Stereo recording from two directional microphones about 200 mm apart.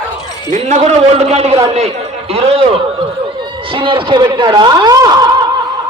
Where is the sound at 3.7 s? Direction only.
25° right (ahead or behind).